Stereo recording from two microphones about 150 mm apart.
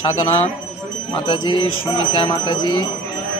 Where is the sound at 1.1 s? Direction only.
30° left (ahead or behind).